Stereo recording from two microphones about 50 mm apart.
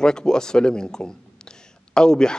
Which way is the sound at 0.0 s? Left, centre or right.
Centre.